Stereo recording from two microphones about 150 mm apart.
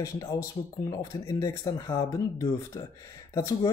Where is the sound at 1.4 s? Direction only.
20° left (ahead or behind).